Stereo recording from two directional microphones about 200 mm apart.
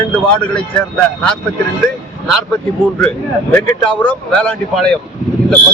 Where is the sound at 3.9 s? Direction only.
5° left (ahead or behind).